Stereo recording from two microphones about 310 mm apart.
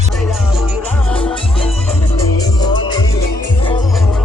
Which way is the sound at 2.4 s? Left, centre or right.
Centre.